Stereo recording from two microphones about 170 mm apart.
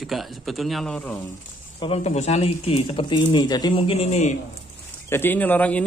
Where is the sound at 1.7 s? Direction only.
35° left (ahead or behind).